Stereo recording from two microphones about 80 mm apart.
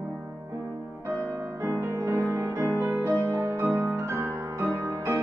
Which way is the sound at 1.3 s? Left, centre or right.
Right.